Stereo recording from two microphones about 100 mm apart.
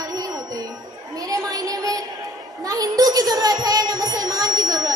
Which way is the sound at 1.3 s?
35° right (ahead or behind).